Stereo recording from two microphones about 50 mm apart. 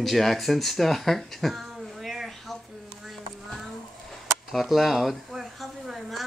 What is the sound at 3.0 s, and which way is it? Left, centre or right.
Clip-clop, centre.